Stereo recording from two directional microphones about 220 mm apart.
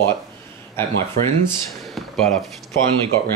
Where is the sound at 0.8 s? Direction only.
10° left (ahead or behind).